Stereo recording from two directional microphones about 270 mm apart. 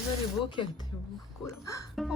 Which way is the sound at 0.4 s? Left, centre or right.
Centre.